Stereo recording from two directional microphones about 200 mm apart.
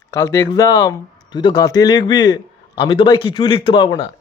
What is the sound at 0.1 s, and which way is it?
Speech, 15° left (ahead or behind).